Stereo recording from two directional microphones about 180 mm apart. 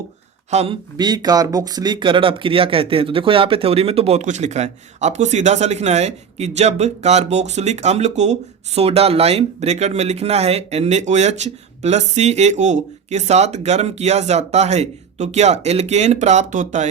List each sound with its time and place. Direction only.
0.5 s speech: 35° right (ahead or behind)
0.9 s speech: 25° right (ahead or behind); by 16.9 s 45° right (ahead or behind)